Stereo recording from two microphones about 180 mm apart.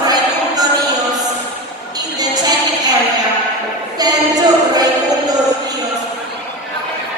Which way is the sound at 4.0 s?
20° right (ahead or behind).